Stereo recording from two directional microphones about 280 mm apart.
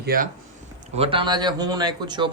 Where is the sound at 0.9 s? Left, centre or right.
Centre.